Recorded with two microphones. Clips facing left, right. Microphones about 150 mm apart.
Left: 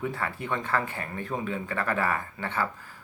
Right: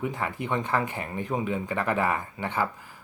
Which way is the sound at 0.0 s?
15° right (ahead or behind).